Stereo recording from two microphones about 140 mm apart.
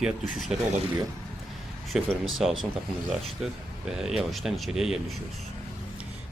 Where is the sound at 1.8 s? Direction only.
Centre (ahead or behind).